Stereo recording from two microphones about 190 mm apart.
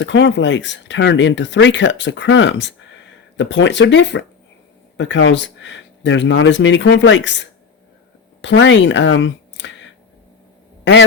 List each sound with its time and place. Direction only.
0.0 s speech: 70° left (ahead or behind)
8.4 s speech: 75° left (ahead or behind)